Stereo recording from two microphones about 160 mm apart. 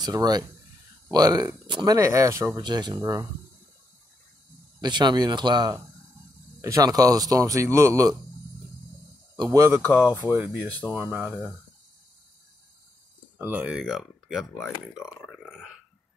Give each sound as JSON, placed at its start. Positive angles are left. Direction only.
{"t": 0.0, "sound": "speech", "side_deg": -25}
{"t": 4.7, "sound": "speech", "side_deg": -25}
{"t": 9.4, "sound": "speech", "side_deg": -20}
{"t": 13.4, "sound": "speech", "side_deg": -10}
{"t": 15.2, "sound": "burping", "side_deg": 5}